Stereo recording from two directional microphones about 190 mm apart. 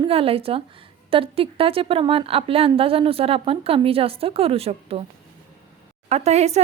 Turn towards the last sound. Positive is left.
turn(degrees=-35)  # may be behind; listen again after turning